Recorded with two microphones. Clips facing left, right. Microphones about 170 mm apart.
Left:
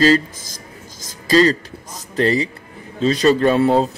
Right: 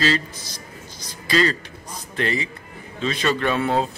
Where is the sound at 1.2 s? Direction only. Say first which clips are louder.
Left 7 dB; 40° left (ahead or behind).